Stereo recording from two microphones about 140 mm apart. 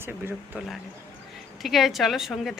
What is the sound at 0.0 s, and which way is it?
Speech, 15° right (ahead or behind).